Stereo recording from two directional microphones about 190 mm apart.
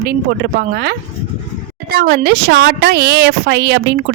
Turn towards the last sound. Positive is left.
turn(degrees=-60)  # may be behind; listen again after turning